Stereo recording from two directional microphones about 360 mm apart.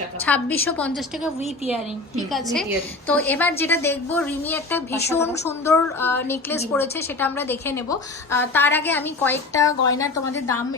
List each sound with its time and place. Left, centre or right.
0.3 s a woman's voice: centre